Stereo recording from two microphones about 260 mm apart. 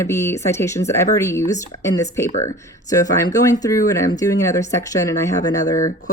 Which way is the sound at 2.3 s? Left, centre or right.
Left.